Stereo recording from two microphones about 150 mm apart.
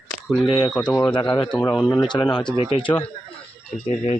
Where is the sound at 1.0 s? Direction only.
30° left (ahead or behind).